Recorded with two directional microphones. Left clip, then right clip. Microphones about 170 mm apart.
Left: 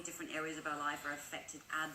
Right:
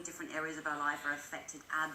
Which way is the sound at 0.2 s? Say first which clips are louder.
Right 3 dB; 30° left (ahead or behind).